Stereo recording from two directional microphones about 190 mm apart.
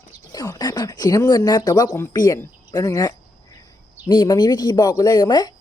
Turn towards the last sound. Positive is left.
turn(degrees=20)  # may be behind; listen again after turning